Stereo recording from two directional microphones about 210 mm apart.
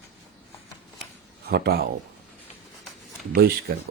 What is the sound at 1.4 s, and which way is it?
Speech, 50° right (ahead or behind).